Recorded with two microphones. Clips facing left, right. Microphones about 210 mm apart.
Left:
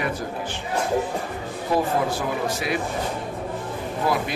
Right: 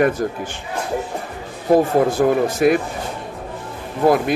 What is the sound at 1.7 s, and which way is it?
Speech, 50° right (ahead or behind).